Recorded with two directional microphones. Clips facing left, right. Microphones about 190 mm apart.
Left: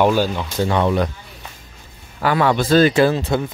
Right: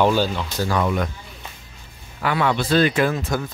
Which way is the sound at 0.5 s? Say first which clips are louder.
Left 5 dB; 25° left (ahead or behind).